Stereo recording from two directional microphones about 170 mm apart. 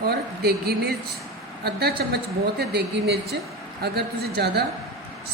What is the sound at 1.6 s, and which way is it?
A woman's voice, 70° right (ahead or behind).